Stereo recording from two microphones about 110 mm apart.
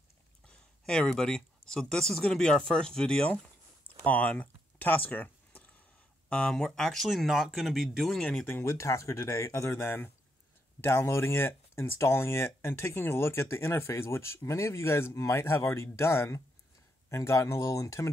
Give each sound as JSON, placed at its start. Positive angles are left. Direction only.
{"t": 0.5, "sound": "speech", "side_deg": 5}
{"t": 8.5, "sound": "speech", "side_deg": 20}